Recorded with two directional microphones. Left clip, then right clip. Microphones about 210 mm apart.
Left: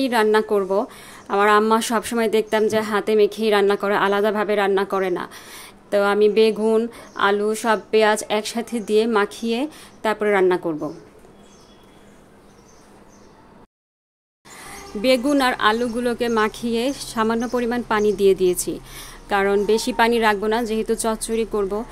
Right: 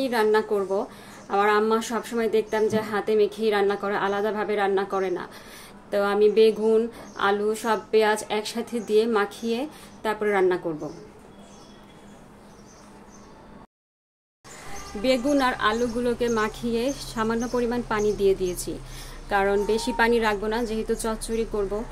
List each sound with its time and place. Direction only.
0.0 s a woman's voice: 35° left (ahead or behind)
15.0 s a woman's voice: 40° left (ahead or behind)